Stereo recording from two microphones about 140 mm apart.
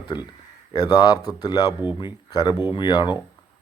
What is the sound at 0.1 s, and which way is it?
Speech, 35° left (ahead or behind).